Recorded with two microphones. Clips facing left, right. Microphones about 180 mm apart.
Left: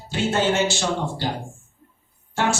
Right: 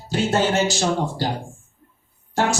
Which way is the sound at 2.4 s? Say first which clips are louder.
Right 2 dB; 40° right (ahead or behind).